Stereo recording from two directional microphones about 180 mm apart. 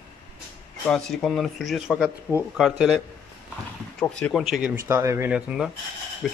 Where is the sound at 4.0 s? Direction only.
5° left (ahead or behind).